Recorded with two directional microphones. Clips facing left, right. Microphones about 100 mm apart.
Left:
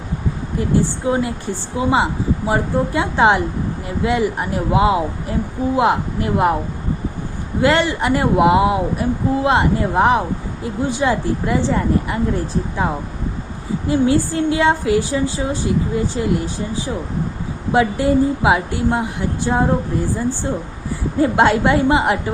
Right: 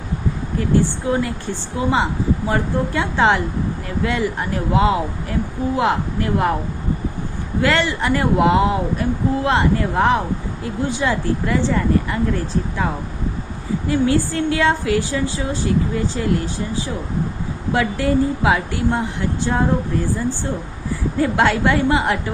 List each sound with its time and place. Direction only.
0.8 s speech: 20° left (ahead or behind)
7.6 s speech: 20° left (ahead or behind)